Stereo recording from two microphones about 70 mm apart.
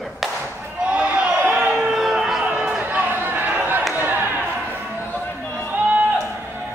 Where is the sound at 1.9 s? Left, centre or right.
Centre.